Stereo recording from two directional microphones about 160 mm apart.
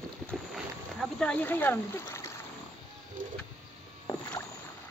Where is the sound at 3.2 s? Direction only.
55° right (ahead or behind).